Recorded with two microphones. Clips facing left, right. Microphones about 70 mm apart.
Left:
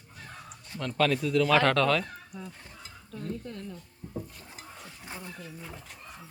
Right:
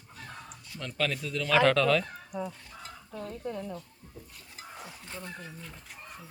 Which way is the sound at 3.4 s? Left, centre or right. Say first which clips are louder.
Right 5 dB; centre.